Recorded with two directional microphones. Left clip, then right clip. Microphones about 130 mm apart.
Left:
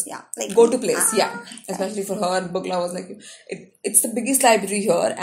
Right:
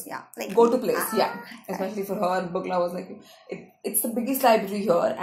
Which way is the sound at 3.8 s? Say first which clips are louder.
Left 5 dB; 15° left (ahead or behind).